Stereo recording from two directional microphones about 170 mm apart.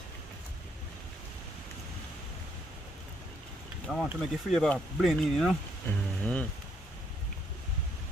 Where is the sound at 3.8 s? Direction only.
Centre (ahead or behind).